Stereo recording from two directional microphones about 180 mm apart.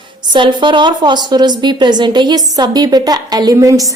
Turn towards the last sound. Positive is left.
turn(degrees=-20)  # may be behind; listen again after turning